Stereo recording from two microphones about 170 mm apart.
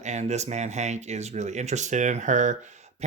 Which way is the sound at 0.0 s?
40° right (ahead or behind).